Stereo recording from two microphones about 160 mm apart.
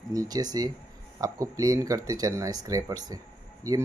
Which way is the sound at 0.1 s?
25° right (ahead or behind).